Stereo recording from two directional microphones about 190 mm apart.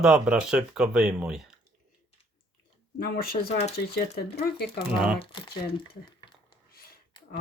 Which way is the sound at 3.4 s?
35° left (ahead or behind).